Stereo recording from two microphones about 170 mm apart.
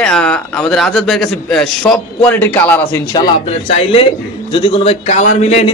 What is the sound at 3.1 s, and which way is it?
A man's voice, 35° left (ahead or behind).